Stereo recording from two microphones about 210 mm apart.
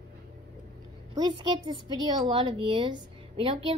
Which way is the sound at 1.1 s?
20° right (ahead or behind).